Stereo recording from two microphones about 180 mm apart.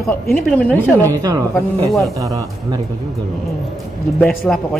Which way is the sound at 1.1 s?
20° right (ahead or behind).